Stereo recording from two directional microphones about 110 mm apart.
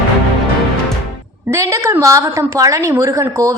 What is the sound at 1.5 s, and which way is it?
A woman's voice, 30° right (ahead or behind).